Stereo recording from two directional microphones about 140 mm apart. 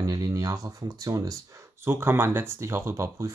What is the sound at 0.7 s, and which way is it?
Speech, 25° right (ahead or behind).